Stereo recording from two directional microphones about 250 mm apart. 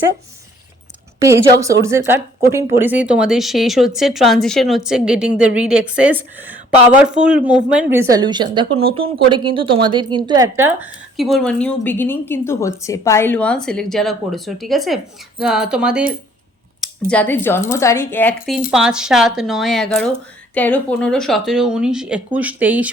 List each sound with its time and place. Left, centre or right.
1.2 s a woman's voice: centre